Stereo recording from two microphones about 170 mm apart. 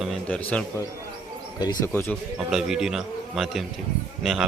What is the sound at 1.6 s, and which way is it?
Speech, 20° left (ahead or behind).